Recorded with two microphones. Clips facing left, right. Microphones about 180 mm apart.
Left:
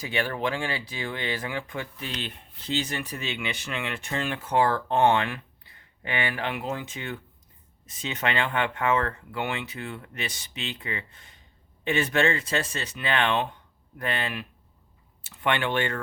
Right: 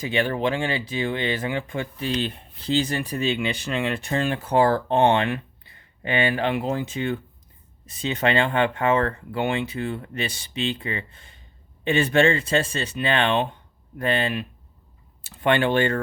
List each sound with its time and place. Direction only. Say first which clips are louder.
0.0 s speech: right 5 dB; 25° right (ahead or behind)